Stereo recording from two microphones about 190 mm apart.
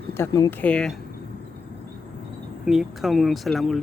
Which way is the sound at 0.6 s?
5° left (ahead or behind).